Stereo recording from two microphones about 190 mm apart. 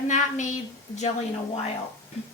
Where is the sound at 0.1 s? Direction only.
40° left (ahead or behind).